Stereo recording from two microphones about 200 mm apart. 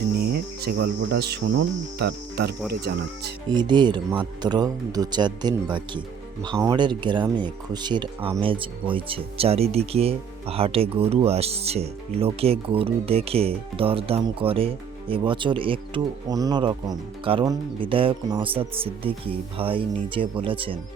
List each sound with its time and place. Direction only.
0.2 s cricket: 50° right (ahead or behind)
2.0 s speech: 55° right (ahead or behind)
3.5 s speech: 20° right (ahead or behind)